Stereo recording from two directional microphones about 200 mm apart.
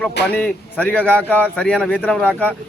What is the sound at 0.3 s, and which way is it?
Speech, 10° left (ahead or behind).